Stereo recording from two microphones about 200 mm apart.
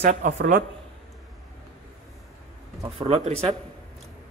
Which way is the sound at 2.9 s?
30° right (ahead or behind).